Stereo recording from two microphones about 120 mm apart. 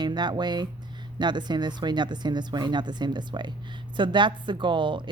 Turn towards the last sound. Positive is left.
turn(degrees=-40)  # may be behind; listen again after turning